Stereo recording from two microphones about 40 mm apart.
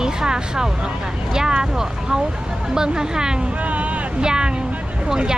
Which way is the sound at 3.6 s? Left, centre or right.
Right.